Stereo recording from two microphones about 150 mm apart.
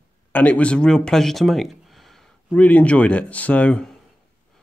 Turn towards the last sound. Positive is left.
turn(degrees=10)  # may be behind; listen again after turning